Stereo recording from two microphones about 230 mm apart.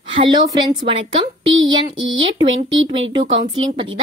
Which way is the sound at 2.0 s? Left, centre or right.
Right.